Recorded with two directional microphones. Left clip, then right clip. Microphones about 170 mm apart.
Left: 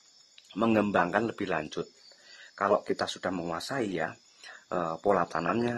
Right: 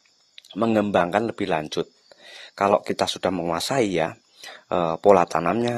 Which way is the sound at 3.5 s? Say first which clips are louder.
Right 10 dB; 45° right (ahead or behind).